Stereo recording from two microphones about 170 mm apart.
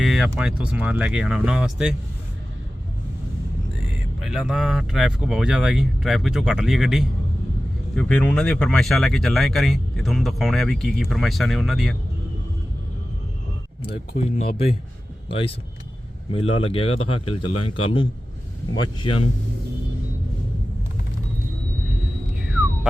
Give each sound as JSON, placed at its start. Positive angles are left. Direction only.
{"t": 0.0, "sound": "a sound", "side_deg": 0}
{"t": 0.3, "sound": "speech", "side_deg": -5}
{"t": 3.8, "sound": "speech", "side_deg": 0}
{"t": 7.9, "sound": "speech", "side_deg": 10}
{"t": 14.1, "sound": "speech", "side_deg": 45}
{"t": 15.3, "sound": "a man's voice", "side_deg": 35}